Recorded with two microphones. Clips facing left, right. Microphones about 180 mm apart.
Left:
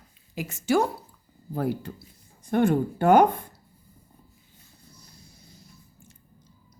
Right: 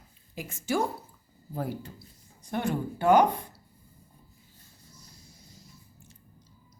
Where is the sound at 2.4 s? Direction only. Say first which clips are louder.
Left 8 dB; 50° left (ahead or behind).